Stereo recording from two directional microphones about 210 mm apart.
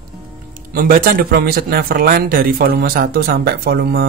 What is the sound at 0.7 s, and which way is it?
Speech, 45° right (ahead or behind).